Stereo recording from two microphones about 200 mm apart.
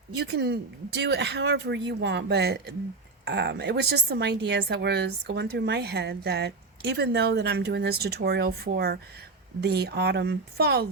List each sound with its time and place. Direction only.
0.2 s a woman's voice: 55° right (ahead or behind)